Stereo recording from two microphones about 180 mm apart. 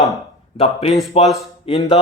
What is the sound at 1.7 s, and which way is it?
Speech, 30° left (ahead or behind).